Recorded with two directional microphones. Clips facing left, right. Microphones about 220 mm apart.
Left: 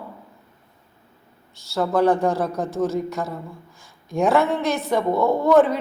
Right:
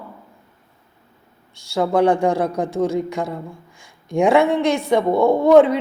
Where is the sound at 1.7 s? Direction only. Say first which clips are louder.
Right 2 dB; 15° right (ahead or behind).